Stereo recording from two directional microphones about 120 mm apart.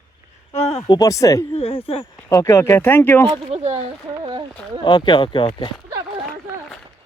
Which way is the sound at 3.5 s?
60° right (ahead or behind).